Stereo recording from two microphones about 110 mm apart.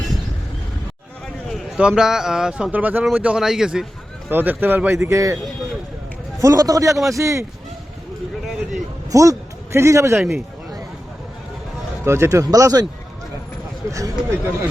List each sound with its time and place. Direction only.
1.5 s a sound: centre (ahead or behind)
1.8 s speech: 5° right (ahead or behind)
4.3 s speech: 20° right (ahead or behind)
6.4 s speech: 35° right (ahead or behind)
9.1 s speech: 30° right (ahead or behind)
10.2 s speech: centre (ahead or behind)
12.0 s speech: 25° right (ahead or behind)
13.9 s speech: 30° right (ahead or behind)